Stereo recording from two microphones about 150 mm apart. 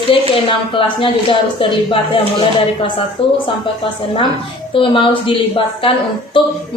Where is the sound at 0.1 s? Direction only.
35° left (ahead or behind).